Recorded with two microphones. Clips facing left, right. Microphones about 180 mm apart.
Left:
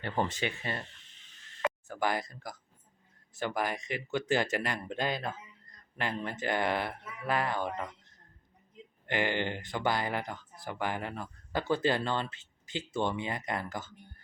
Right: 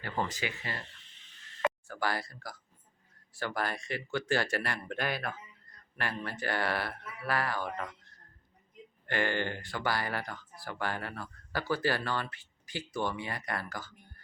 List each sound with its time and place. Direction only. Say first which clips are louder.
0.0 s speech: left 3 dB; 25° left (ahead or behind)
1.9 s speech: left 2 dB; 20° left (ahead or behind)